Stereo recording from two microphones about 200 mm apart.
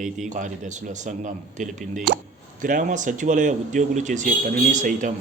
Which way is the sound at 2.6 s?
40° right (ahead or behind).